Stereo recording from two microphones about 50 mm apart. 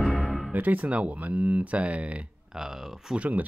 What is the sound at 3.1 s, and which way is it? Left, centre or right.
Speech, right.